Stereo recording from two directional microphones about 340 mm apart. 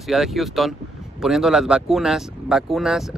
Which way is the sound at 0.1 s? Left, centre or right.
Centre.